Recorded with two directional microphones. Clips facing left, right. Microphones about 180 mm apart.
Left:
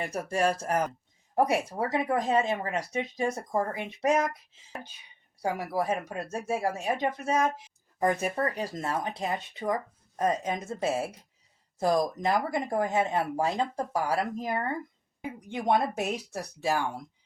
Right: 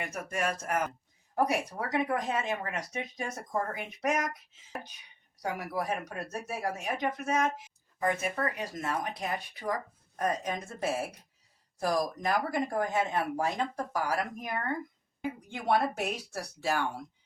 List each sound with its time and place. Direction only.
0.0 s speech: 30° left (ahead or behind)
5.4 s speech: 30° left (ahead or behind)